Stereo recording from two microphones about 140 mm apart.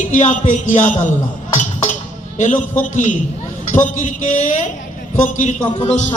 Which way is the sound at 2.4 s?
60° left (ahead or behind).